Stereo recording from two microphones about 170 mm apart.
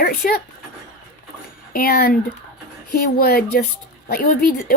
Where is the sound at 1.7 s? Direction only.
60° left (ahead or behind).